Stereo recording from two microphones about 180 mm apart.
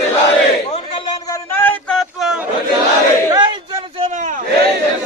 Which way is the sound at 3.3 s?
25° right (ahead or behind).